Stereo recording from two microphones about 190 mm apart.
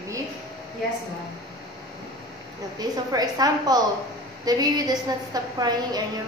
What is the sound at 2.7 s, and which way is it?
Speech, 20° right (ahead or behind).